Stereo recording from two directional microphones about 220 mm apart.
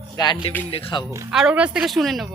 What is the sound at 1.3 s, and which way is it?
Speech, 5° right (ahead or behind).